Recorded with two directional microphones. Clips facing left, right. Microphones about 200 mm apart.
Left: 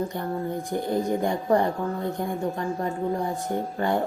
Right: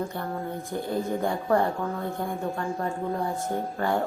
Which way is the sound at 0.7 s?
15° left (ahead or behind).